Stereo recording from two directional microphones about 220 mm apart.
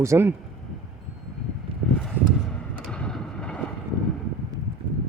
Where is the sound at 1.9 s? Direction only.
5° left (ahead or behind).